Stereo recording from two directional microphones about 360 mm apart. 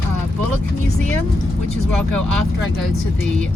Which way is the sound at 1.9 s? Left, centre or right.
Centre.